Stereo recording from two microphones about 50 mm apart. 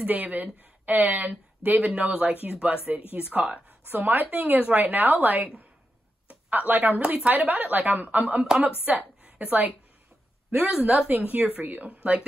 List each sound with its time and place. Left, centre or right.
0.0 s speech: right
3.8 s speech: right
6.2 s a sound: right
7.2 s a woman's voice: right